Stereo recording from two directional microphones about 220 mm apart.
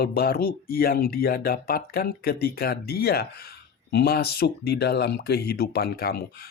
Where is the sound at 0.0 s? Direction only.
45° left (ahead or behind).